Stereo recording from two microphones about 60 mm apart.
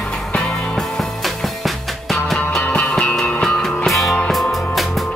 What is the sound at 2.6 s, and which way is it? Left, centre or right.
Music, left.